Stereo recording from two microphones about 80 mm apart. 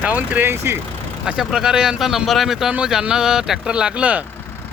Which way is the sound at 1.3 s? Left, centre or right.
Centre.